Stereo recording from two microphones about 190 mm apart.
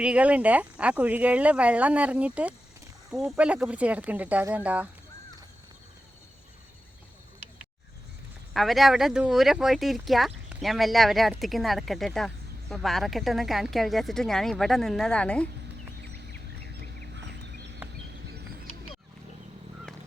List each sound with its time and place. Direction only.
0.0 s speech: 5° right (ahead or behind)
8.5 s speech: centre (ahead or behind)
16.8 s fowl: 60° right (ahead or behind)